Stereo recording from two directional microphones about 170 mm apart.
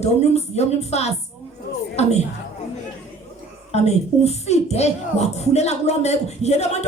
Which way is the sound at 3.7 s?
40° left (ahead or behind).